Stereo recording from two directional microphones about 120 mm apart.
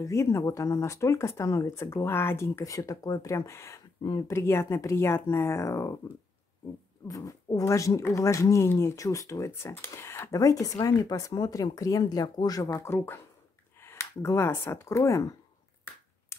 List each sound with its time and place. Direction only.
0.0 s speech: 25° left (ahead or behind)
7.1 s speech: 30° left (ahead or behind)